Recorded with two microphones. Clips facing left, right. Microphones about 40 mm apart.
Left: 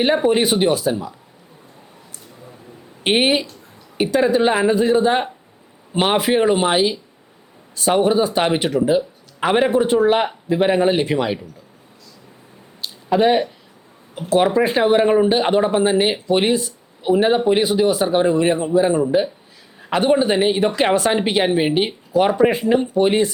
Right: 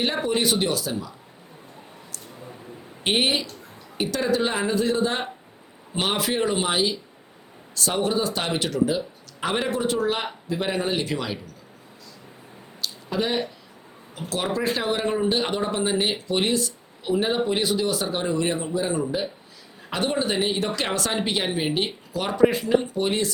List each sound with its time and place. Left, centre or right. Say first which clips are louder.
0.0 s speech: left 7 dB; left
3.0 s speech: left 6 dB; left
12.8 s a sound: left 10 dB; left
14.2 s speech: left 11 dB; left